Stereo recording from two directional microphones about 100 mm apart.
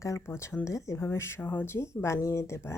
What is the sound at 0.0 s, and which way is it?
A woman's voice, 30° left (ahead or behind).